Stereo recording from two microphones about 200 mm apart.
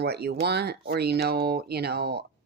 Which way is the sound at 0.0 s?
55° right (ahead or behind).